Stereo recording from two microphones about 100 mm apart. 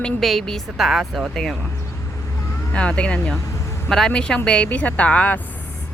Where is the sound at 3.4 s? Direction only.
30° left (ahead or behind).